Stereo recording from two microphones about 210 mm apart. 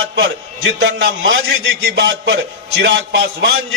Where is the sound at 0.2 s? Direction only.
60° right (ahead or behind).